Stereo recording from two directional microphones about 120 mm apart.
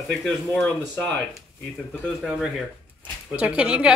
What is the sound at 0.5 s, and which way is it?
Speech, 10° left (ahead or behind).